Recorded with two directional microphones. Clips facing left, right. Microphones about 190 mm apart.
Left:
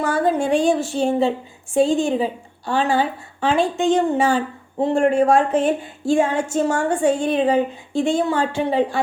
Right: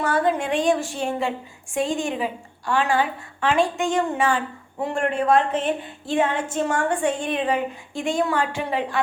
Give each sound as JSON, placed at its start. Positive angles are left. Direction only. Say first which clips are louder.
{"t": 0.3, "sound": "a woman's voice", "louder": "left 5 dB", "side_deg": 30}